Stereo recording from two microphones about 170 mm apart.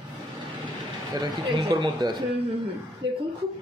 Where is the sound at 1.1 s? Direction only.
25° right (ahead or behind).